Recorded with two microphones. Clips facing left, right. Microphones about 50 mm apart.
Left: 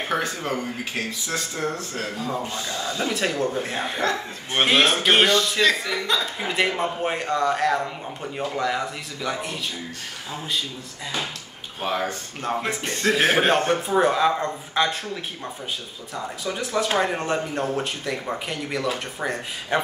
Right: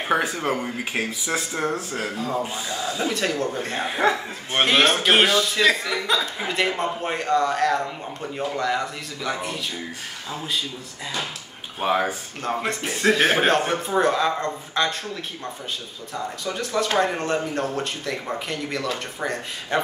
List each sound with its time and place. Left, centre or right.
0.1 s speech: centre
11.8 s speech: centre
12.4 s speech: centre
16.4 s speech: centre